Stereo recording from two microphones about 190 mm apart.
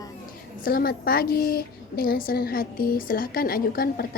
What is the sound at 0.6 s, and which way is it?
A woman's voice, 50° left (ahead or behind).